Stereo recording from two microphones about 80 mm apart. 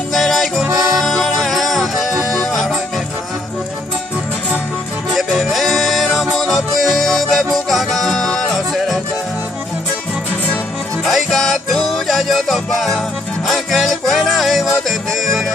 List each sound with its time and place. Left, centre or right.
0.1 s music: centre
0.7 s music: right
0.9 s music: centre
5.1 s music: centre
11.0 s music: centre